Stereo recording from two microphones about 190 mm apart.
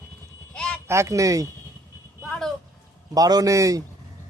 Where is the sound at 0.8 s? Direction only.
15° right (ahead or behind).